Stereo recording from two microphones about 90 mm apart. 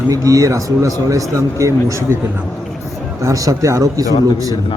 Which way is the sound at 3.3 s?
35° right (ahead or behind).